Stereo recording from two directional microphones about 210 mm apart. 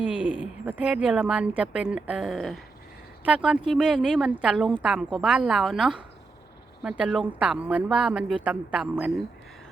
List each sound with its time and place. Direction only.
0.0 s a woman's voice: 10° right (ahead or behind)